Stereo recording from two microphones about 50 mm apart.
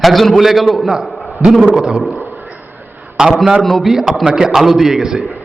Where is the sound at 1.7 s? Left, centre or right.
Centre.